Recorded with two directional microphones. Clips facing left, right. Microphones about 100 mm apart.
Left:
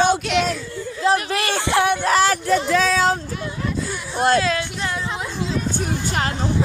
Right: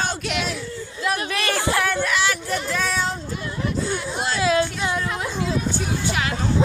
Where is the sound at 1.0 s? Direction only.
30° left (ahead or behind).